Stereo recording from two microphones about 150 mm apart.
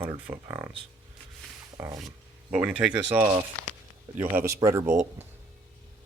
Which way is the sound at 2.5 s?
5° right (ahead or behind).